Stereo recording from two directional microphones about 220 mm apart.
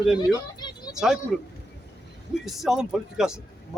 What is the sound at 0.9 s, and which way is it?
Speech, centre (ahead or behind).